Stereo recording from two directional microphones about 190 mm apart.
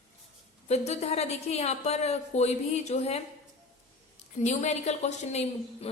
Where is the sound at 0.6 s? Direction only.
35° left (ahead or behind).